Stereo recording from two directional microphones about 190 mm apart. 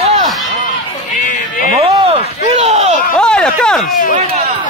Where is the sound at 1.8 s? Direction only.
30° right (ahead or behind).